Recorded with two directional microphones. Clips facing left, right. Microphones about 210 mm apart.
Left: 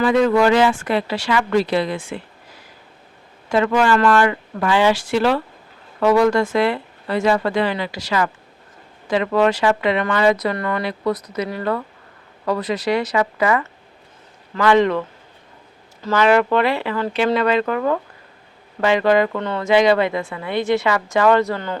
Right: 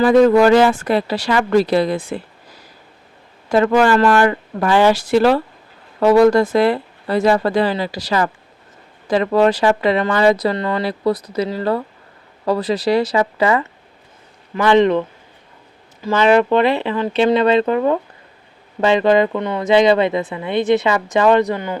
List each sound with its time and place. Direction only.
0.0 s speech: 40° right (ahead or behind)
3.5 s speech: 40° right (ahead or behind); by 15.0 s 20° right (ahead or behind)
16.1 s speech: 25° right (ahead or behind)